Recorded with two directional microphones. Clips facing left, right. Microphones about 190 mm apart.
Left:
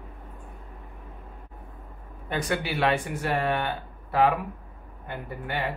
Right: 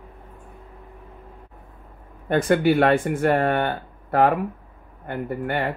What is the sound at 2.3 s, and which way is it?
Speech, 50° right (ahead or behind).